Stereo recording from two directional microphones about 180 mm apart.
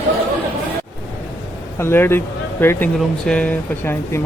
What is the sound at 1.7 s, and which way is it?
Speech, 10° left (ahead or behind).